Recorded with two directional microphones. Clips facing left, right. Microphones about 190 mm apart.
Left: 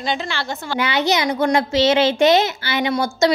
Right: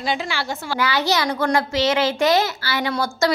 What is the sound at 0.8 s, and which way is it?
A child's voice, 20° left (ahead or behind).